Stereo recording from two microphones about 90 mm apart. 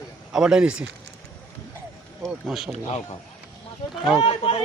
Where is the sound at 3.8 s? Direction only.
70° left (ahead or behind).